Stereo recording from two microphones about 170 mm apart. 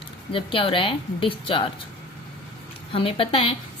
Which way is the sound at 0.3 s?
30° left (ahead or behind).